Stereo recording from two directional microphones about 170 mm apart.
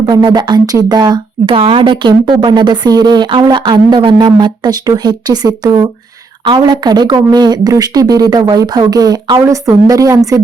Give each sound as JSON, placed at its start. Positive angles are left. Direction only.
{"t": 0.0, "sound": "speech", "side_deg": -25}